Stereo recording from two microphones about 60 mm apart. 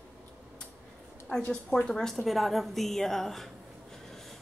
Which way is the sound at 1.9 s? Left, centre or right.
Centre.